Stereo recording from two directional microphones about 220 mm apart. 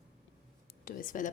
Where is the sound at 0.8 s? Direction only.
40° left (ahead or behind).